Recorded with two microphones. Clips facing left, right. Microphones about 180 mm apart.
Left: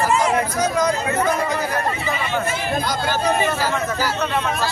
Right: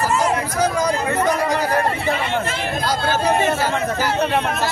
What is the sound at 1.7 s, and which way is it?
Speech, 55° right (ahead or behind).